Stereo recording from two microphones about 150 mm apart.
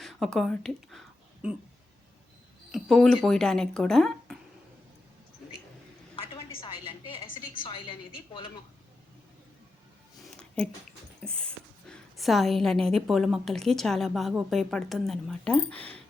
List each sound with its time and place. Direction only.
0.0 s speech: centre (ahead or behind)
2.7 s a woman's voice: centre (ahead or behind)
7.5 s a woman's voice: 35° left (ahead or behind)
10.3 s a sound: 5° left (ahead or behind)
11.2 s a woman's voice: 5° left (ahead or behind)